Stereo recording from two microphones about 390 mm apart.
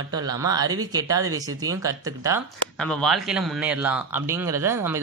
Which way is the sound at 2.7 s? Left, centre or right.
Centre.